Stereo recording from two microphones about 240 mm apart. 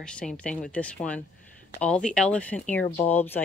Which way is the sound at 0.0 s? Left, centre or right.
Centre.